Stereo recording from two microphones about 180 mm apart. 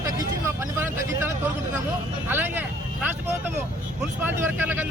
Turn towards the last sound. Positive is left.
turn(degrees=-10)  # may be behind; listen again after turning